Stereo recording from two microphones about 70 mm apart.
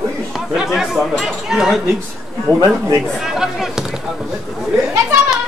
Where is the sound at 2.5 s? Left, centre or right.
Right.